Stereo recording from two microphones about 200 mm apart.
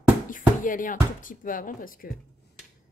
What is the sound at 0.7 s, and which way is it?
Speech, 40° left (ahead or behind).